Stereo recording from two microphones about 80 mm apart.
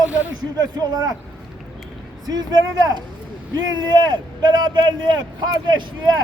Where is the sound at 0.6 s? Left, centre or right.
Right.